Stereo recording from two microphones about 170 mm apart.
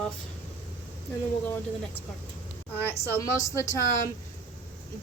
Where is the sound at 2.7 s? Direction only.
15° left (ahead or behind).